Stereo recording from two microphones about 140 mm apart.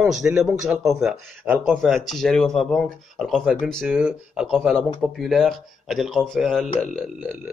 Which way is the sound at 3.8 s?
10° right (ahead or behind).